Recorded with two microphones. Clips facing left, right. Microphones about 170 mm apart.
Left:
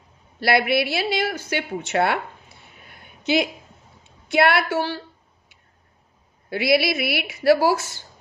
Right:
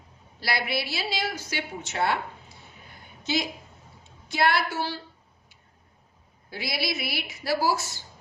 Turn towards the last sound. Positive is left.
turn(degrees=60)  # may be behind; listen again after turning